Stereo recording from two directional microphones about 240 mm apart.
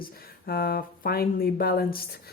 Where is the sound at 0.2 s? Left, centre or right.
Left.